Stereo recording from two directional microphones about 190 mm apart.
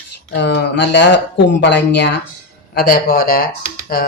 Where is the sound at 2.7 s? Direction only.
55° left (ahead or behind).